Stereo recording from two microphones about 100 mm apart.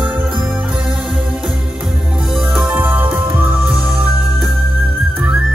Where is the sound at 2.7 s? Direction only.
15° right (ahead or behind).